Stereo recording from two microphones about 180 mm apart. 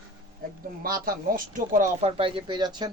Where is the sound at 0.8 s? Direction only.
55° right (ahead or behind).